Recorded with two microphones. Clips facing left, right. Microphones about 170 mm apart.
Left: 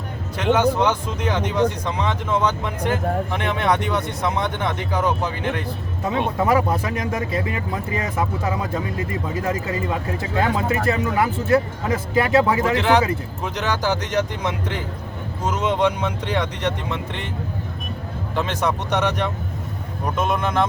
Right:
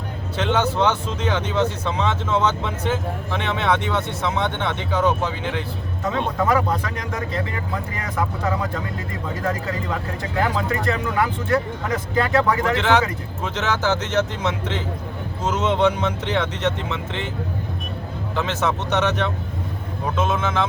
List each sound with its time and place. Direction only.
0.3 s speech: 10° left (ahead or behind)
18.3 s speech: 15° left (ahead or behind)